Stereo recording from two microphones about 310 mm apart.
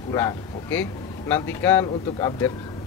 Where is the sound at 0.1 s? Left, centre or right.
Centre.